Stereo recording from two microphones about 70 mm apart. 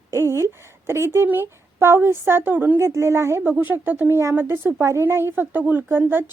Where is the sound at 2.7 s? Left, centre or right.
Right.